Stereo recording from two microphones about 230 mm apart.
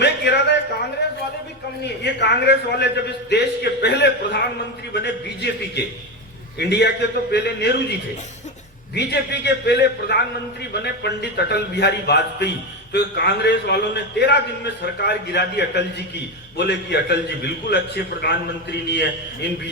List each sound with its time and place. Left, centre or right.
0.0 s a sound: left
2.0 s a man's voice: left
9.0 s a man's voice: left